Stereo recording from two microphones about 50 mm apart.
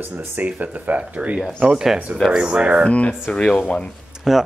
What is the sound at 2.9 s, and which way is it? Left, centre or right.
Speech, left.